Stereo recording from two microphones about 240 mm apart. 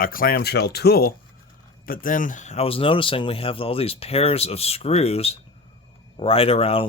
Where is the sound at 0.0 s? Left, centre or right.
Left.